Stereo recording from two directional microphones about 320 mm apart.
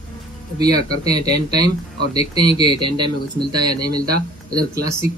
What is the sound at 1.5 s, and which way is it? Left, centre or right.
Speech, right.